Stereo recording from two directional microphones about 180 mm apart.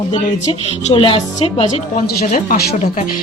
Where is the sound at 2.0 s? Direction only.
55° left (ahead or behind).